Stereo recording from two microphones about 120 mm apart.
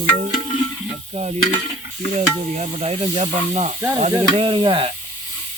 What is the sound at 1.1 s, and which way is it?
Stir, 65° right (ahead or behind).